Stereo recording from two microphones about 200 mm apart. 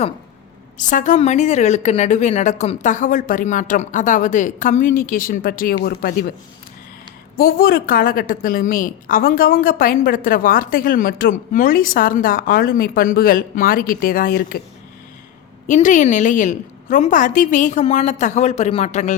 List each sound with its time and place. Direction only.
0.8 s a woman's voice: 40° left (ahead or behind)
7.3 s a woman's voice: 50° left (ahead or behind)
15.6 s a woman's voice: 40° left (ahead or behind)